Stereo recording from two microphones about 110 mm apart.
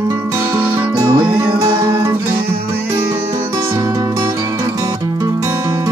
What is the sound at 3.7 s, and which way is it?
Music, 30° right (ahead or behind).